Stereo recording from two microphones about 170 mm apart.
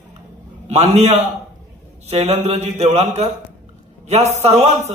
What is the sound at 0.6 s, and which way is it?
A man's voice, 40° right (ahead or behind).